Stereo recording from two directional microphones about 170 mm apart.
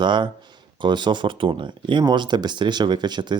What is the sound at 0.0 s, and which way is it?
Speech, 25° right (ahead or behind).